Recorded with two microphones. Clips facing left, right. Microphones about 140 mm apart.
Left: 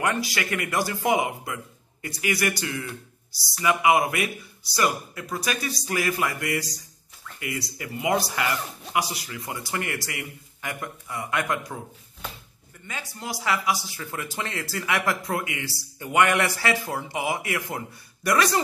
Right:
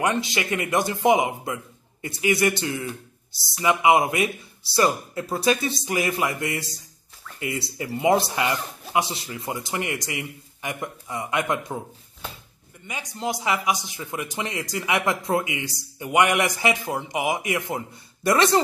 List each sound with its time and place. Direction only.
0.0 s speech: 20° right (ahead or behind)
12.8 s speech: 15° right (ahead or behind)